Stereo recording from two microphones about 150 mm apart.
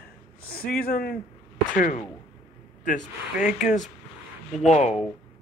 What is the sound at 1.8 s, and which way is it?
A man's voice, 55° left (ahead or behind).